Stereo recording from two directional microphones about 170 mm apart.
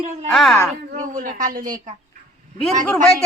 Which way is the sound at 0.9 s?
50° right (ahead or behind).